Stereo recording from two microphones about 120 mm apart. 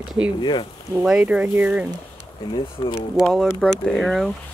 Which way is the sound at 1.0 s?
5° right (ahead or behind).